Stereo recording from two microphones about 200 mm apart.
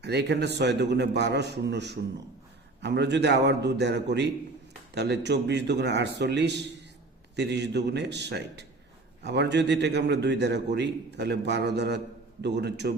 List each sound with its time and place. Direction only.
0.0 s a man's voice: 55° right (ahead or behind)